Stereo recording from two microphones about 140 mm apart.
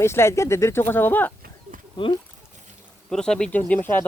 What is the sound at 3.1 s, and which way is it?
Speech, 5° left (ahead or behind).